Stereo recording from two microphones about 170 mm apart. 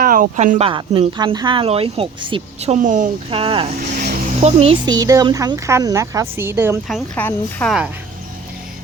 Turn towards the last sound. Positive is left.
turn(degrees=-5)  # may be behind; listen again after turning